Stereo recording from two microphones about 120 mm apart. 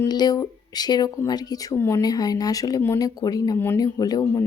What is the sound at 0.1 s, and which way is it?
Speech, 35° left (ahead or behind).